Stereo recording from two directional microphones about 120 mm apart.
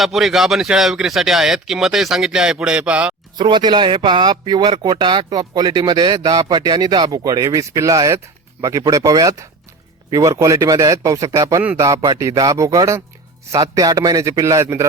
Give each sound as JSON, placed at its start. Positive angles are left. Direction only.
{"t": 0.0, "sound": "speech", "side_deg": 0}
{"t": 3.3, "sound": "speech", "side_deg": -40}